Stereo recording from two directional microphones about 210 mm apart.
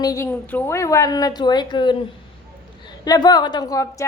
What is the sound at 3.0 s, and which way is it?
A woman's voice, 20° left (ahead or behind).